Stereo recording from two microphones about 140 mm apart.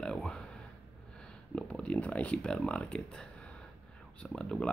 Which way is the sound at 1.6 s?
10° left (ahead or behind).